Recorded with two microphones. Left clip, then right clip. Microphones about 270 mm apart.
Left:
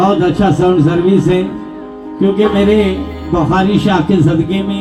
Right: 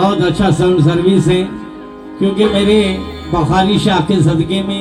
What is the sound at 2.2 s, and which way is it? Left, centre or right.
Music, right.